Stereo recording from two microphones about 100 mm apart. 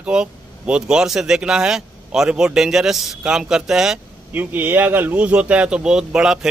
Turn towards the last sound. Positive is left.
turn(degrees=-5)  # may be behind; listen again after turning